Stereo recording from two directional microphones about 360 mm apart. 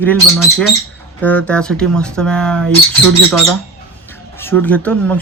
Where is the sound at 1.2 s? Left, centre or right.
Centre.